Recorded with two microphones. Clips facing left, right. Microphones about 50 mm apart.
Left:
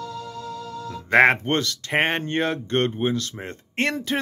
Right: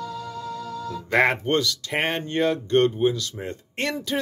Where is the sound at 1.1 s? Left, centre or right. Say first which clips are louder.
Left 3 dB; left.